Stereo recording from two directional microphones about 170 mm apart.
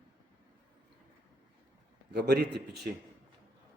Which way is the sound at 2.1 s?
75° right (ahead or behind).